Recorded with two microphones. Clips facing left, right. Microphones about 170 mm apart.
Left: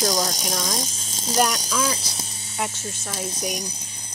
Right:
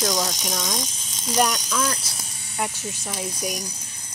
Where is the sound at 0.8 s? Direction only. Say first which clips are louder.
Left 1 dB; 35° left (ahead or behind).